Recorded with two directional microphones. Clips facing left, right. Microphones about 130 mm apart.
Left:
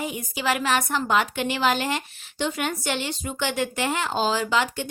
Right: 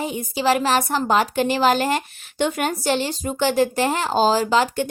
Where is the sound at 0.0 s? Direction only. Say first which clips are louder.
Right 6 dB; 30° right (ahead or behind).